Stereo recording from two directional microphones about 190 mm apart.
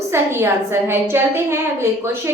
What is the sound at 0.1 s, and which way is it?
A woman's voice, 15° right (ahead or behind).